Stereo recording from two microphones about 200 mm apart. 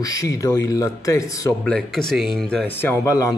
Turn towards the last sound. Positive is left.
turn(degrees=15)  # may be behind; listen again after turning